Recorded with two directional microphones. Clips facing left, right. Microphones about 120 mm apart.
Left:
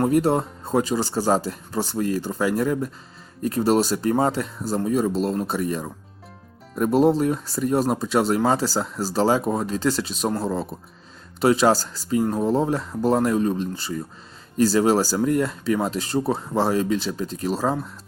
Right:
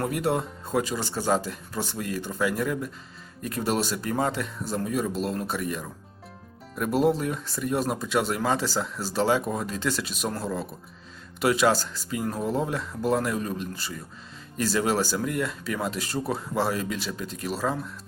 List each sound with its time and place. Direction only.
0.0 s speech: 30° left (ahead or behind)